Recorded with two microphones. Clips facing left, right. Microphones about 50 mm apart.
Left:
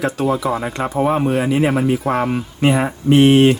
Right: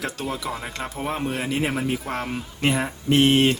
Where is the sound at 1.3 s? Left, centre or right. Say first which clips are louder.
Left 9 dB; centre.